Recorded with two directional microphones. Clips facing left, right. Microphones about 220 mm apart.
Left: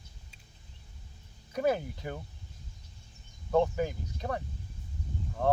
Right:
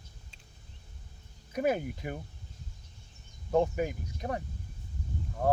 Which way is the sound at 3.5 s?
15° right (ahead or behind).